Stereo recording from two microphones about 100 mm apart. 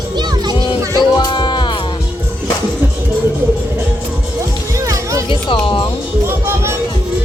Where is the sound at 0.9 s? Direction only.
40° left (ahead or behind).